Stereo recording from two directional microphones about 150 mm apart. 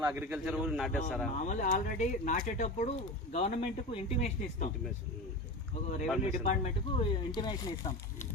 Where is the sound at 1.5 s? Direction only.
55° left (ahead or behind).